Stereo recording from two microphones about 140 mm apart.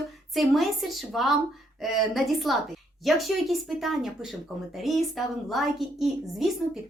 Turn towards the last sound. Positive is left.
turn(degrees=0)  # may be behind; listen again after turning